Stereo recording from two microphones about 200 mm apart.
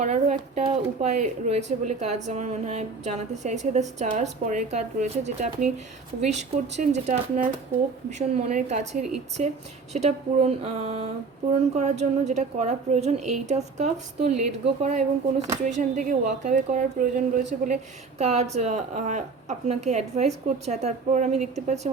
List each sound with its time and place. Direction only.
0.0 s speech: 35° right (ahead or behind)
18.2 s speech: 35° right (ahead or behind)